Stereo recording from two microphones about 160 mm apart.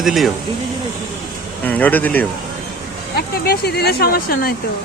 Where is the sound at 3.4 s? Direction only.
85° left; by 4.5 s 65° left (ahead or behind).